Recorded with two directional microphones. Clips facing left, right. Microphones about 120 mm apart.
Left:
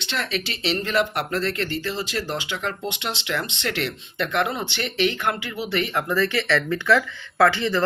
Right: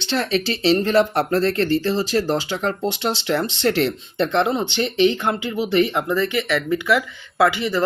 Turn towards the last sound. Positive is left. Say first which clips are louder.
# right 1 dB
turn(degrees=-15)  # may be behind; listen again after turning